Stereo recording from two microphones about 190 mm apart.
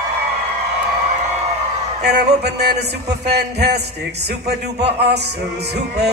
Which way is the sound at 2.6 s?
60° right (ahead or behind).